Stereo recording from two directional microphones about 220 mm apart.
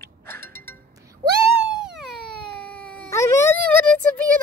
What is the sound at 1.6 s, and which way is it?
Baby cry, centre (ahead or behind).